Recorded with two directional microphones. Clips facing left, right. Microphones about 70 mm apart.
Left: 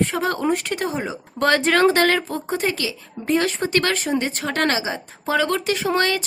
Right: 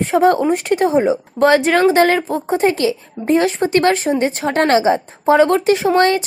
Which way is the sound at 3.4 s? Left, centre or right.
Right.